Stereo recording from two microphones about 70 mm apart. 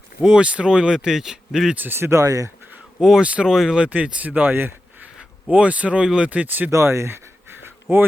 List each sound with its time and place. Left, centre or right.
0.2 s speech: centre
1.7 s speech: right
2.0 s speech: right
3.0 s speech: centre
3.8 s speech: centre
5.5 s speech: centre
6.7 s speech: right